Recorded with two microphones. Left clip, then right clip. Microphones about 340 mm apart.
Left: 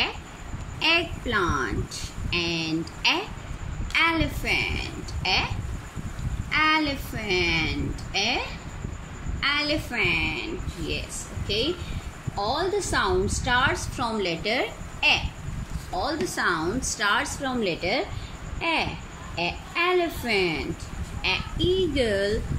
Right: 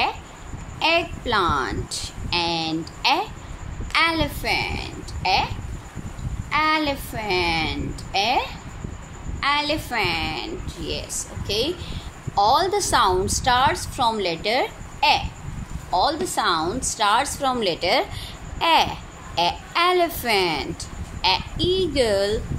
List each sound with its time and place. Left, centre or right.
0.7 s a woman's voice: centre
6.5 s a woman's voice: centre